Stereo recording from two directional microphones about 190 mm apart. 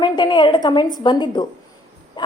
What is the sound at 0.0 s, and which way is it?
A woman's voice, 25° left (ahead or behind).